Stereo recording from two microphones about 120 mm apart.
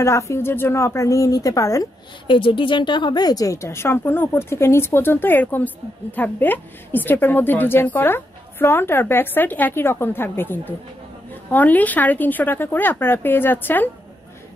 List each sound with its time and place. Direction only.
0.0 s a woman's voice: 25° left (ahead or behind)
2.2 s a woman's voice: 45° left (ahead or behind); by 13.8 s 15° left (ahead or behind)